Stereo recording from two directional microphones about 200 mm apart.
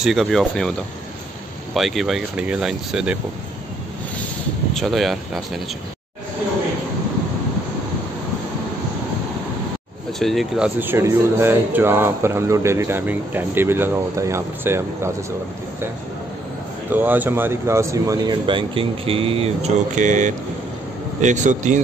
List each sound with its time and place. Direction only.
0.0 s speech: centre (ahead or behind)
4.7 s speech: centre (ahead or behind)
10.1 s speech: centre (ahead or behind)
16.9 s a man's voice: 10° right (ahead or behind); by 21.8 s 35° right (ahead or behind)